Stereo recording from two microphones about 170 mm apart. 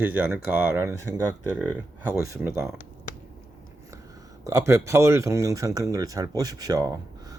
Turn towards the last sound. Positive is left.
turn(degrees=-20)  # may be behind; listen again after turning